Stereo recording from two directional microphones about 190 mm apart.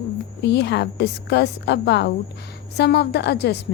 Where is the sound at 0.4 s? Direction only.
65° left (ahead or behind).